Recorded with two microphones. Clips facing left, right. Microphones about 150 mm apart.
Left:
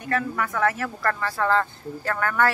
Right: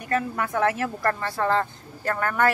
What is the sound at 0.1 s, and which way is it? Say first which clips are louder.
A woman's voice: right 1 dB; 30° right (ahead or behind).